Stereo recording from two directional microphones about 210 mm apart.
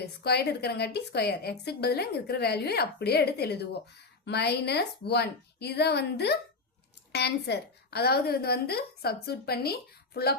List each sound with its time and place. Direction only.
0.0 s a woman's voice: 50° left (ahead or behind)